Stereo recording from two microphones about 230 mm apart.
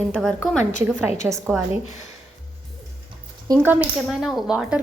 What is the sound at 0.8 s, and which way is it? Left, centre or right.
Speech, centre.